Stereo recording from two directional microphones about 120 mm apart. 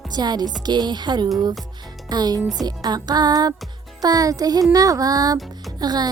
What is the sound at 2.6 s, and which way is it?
Music, 35° right (ahead or behind).